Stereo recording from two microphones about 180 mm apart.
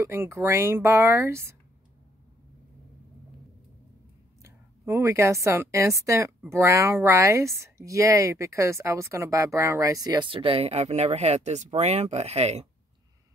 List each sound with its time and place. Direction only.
0.0 s speech: 15° right (ahead or behind)
4.4 s a woman's voice: 15° right (ahead or behind); by 12.6 s 35° right (ahead or behind)